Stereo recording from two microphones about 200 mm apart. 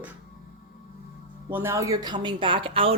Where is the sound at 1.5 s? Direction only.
10° right (ahead or behind); by 2.9 s 25° right (ahead or behind).